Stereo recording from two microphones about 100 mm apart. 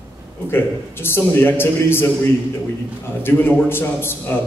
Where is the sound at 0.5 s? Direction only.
20° left (ahead or behind).